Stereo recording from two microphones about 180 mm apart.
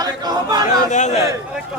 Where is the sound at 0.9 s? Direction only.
40° left (ahead or behind).